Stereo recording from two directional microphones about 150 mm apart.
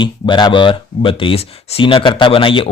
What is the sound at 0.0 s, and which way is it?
Speech, 30° left (ahead or behind).